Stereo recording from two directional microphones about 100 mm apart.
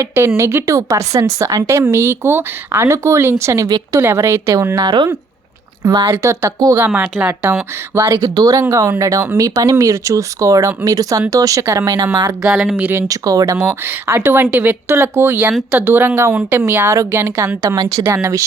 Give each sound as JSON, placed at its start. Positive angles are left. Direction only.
{"t": 0.0, "sound": "speech", "side_deg": -25}
{"t": 6.7, "sound": "speech", "side_deg": -20}
{"t": 8.2, "sound": "speech", "side_deg": -35}
{"t": 12.4, "sound": "speech", "side_deg": -5}
{"t": 13.1, "sound": "speech", "side_deg": -35}
{"t": 14.2, "sound": "speech", "side_deg": -20}
{"t": 17.6, "sound": "speech", "side_deg": -40}